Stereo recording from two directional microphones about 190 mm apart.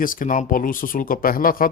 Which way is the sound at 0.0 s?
45° left (ahead or behind).